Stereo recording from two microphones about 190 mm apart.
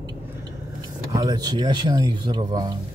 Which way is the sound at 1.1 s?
20° right (ahead or behind).